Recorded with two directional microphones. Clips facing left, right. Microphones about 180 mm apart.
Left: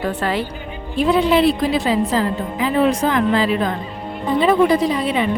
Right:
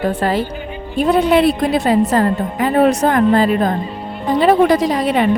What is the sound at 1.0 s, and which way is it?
A woman's voice, 55° right (ahead or behind).